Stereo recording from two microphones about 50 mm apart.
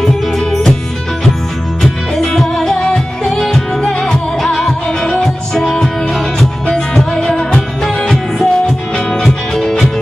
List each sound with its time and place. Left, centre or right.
0.0 s music: centre
1.8 s music: centre
7.2 s music: centre